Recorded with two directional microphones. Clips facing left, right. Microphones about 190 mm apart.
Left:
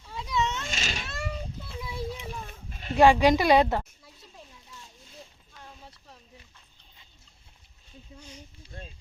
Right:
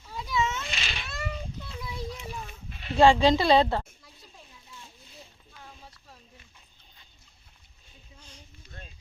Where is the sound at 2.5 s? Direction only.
45° left (ahead or behind).